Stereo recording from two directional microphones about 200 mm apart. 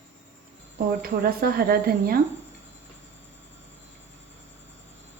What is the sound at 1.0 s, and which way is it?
A woman's voice, 50° right (ahead or behind).